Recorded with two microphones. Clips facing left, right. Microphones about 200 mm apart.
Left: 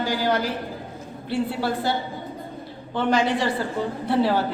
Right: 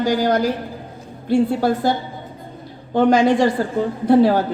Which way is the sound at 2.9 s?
45° right (ahead or behind).